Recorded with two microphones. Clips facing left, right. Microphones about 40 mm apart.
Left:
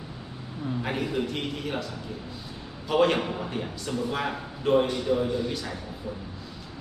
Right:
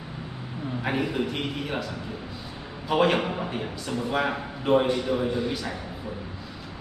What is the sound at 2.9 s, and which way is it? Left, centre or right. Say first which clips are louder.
A man's voice: right 1 dB; centre.